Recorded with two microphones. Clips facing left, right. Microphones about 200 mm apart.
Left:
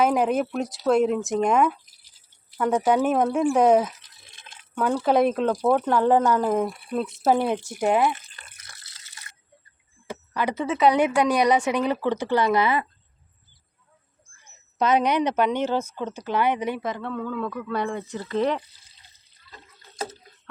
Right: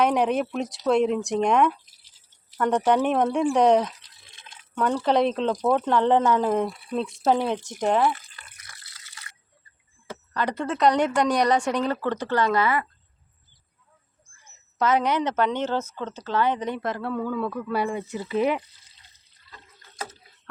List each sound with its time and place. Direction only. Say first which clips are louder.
0.0 s speech: left 1 dB; centre (ahead or behind)
8.1 s water: even; 25° left (ahead or behind)
9.0 s drip: right 1 dB; 20° left (ahead or behind)
10.1 s speech: left 1 dB; 10° left (ahead or behind)
14.8 s speech: left 2 dB; 15° left (ahead or behind); by 18.6 s 10° right (ahead or behind)